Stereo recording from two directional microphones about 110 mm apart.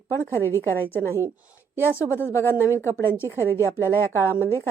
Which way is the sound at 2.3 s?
20° left (ahead or behind).